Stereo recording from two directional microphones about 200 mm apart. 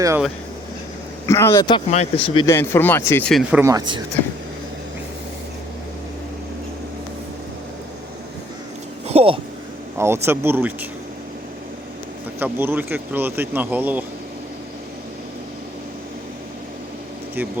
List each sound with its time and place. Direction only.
1.3 s speech: 15° left (ahead or behind)
1.9 s speech: 30° left (ahead or behind)
2.5 s speech: 10° left (ahead or behind)
3.5 s speech: 15° right (ahead or behind)
9.0 s a sound: 30° right (ahead or behind)
10.0 s speech: 10° right (ahead or behind)
12.4 s speech: 10° right (ahead or behind)